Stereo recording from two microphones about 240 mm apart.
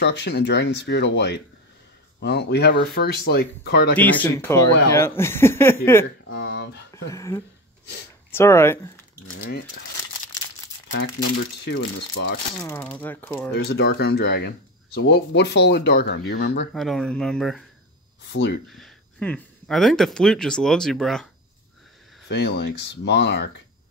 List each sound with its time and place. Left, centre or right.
0.0 s speech: left
3.9 s speech: centre
6.4 s a sound: left
7.1 s speech: centre
11.6 s speech: left
12.9 s speech: centre
13.5 s speech: left
16.7 s speech: centre
18.3 s speech: left
18.7 s speech: centre
22.3 s speech: left